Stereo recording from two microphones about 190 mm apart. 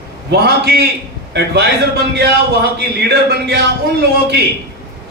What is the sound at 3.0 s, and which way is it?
Speech, 60° right (ahead or behind).